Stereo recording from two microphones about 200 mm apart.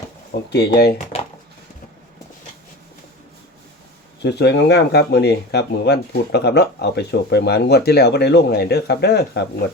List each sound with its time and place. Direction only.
0.5 s speech: 55° left (ahead or behind)
4.2 s speech: 55° left (ahead or behind)